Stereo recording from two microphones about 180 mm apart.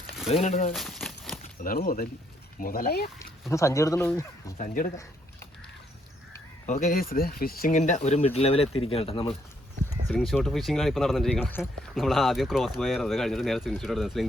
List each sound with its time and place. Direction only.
0.3 s speech: 35° left (ahead or behind)
0.7 s a sound: centre (ahead or behind)
1.6 s speech: 55° left (ahead or behind)
3.5 s speech: 15° left (ahead or behind)
4.5 s speech: 45° left (ahead or behind)
6.7 s speech: 45° left (ahead or behind); by 9.3 s 30° left (ahead or behind)
10.1 s speech: centre (ahead or behind)